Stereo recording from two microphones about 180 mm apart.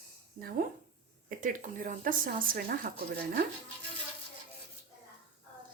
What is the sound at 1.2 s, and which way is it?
A woman's voice, 45° right (ahead or behind).